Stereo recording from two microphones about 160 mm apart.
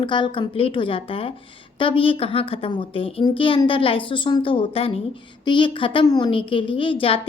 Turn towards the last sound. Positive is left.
turn(degrees=35)  # may be behind; listen again after turning